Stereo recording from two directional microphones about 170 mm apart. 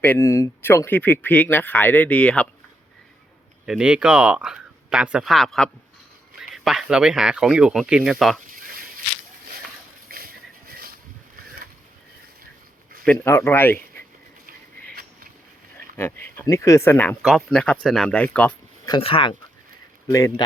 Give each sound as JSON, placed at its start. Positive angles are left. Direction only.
{"t": 0.0, "sound": "speech", "side_deg": 15}
{"t": 3.7, "sound": "speech", "side_deg": -5}
{"t": 8.4, "sound": "a sound", "side_deg": -55}
{"t": 10.1, "sound": "a sound", "side_deg": -60}
{"t": 13.1, "sound": "speech", "side_deg": 15}
{"t": 16.0, "sound": "speech", "side_deg": 15}
{"t": 17.2, "sound": "speech", "side_deg": 0}
{"t": 18.9, "sound": "speech", "side_deg": 30}